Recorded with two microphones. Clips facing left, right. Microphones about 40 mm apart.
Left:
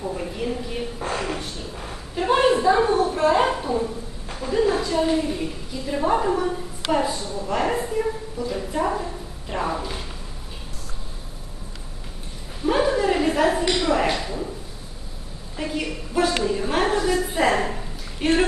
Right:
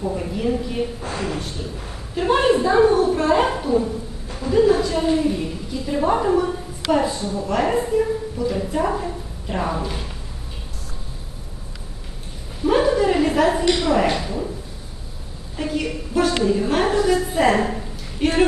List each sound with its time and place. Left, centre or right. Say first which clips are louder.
0.0 s a woman's voice: right 4 dB; centre
1.1 s speech: right 1 dB; left
2.1 s a woman's voice: right 1 dB; centre
7.2 s a woman's voice: right 5 dB; right
7.5 s a woman's voice: right 4 dB; centre
12.6 s a sound: right 3 dB; centre
15.5 s a sound: right 3 dB; centre
16.3 s a woman's voice: right 3 dB; centre